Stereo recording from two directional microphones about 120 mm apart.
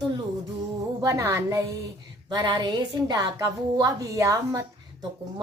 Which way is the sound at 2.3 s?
35° right (ahead or behind).